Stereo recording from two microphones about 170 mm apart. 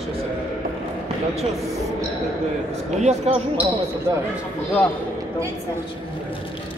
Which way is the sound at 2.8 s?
40° right (ahead or behind).